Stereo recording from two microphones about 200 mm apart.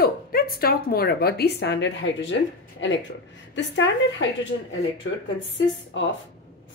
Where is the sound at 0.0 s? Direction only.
50° left (ahead or behind); by 5.2 s 75° left (ahead or behind).